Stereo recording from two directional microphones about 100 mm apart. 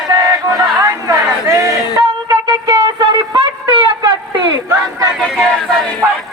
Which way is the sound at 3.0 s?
50° right (ahead or behind).